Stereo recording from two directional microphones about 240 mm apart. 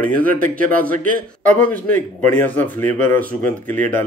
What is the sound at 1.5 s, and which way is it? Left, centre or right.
Speech, centre.